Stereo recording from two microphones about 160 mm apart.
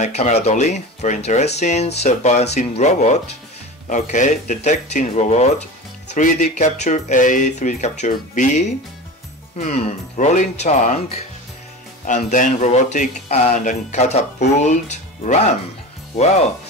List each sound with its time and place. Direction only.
0.0 s speech: 45° left (ahead or behind)